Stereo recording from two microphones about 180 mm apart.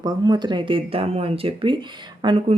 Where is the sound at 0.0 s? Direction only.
25° right (ahead or behind).